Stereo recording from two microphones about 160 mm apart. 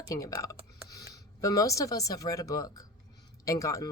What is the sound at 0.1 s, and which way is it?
Speech, 20° left (ahead or behind).